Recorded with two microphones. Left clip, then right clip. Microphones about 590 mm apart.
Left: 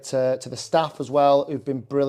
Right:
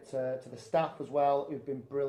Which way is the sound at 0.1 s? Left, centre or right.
Left.